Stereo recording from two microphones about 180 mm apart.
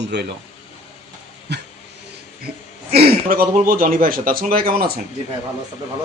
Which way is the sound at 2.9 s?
60° right (ahead or behind).